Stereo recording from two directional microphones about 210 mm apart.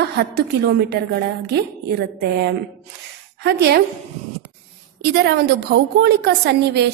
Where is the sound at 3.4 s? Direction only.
50° right (ahead or behind).